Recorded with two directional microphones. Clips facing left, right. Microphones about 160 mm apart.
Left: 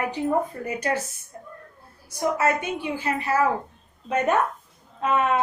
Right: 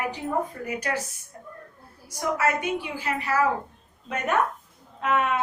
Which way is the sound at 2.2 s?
25° left (ahead or behind).